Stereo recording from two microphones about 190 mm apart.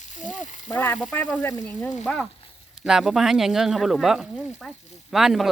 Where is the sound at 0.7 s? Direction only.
10° left (ahead or behind).